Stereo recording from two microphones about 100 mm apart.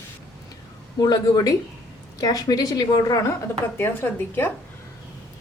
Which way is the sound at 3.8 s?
20° left (ahead or behind).